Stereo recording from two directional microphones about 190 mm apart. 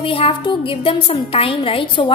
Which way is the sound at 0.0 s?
30° left (ahead or behind).